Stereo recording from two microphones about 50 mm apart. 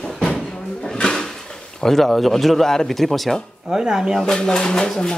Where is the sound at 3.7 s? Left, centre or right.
Centre.